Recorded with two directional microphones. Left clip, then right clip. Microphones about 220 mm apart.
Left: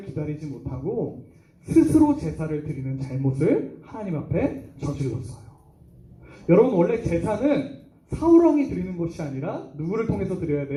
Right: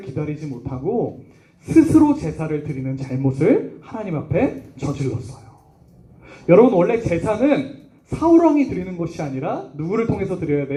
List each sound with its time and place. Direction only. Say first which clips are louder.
0.2 s speech: right 5 dB; 55° right (ahead or behind)
1.6 s a man's voice: right 4 dB; 50° right (ahead or behind)
6.2 s a man's voice: right 6 dB; 50° right (ahead or behind)